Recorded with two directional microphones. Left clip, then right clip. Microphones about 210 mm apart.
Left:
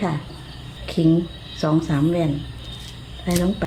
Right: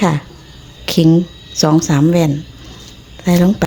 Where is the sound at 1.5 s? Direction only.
50° right (ahead or behind).